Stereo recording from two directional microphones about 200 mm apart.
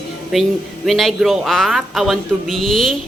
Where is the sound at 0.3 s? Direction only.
Centre (ahead or behind).